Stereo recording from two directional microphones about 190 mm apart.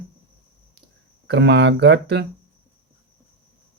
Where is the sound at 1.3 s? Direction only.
65° right (ahead or behind).